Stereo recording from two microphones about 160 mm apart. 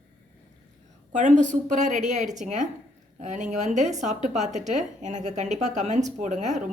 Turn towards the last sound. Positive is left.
turn(degrees=-50)  # may be behind; listen again after turning